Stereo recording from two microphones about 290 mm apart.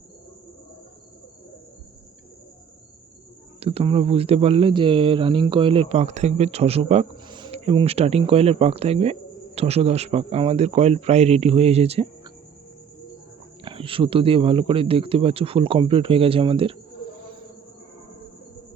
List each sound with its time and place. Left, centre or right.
3.6 s speech: centre
13.7 s speech: centre